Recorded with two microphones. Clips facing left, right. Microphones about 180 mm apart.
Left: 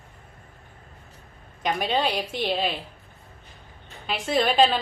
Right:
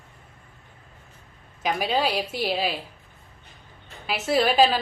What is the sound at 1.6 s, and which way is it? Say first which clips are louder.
A woman's voice: even; 5° right (ahead or behind).